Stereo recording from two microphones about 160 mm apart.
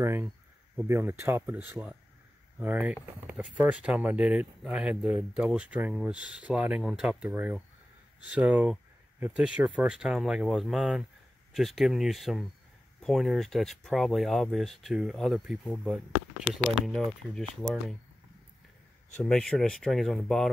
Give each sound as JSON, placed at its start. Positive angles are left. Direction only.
{"t": 0.0, "sound": "speech", "side_deg": -15}
{"t": 19.2, "sound": "speech", "side_deg": 5}